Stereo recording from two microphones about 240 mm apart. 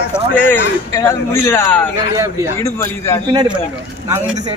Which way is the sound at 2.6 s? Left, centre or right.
Centre.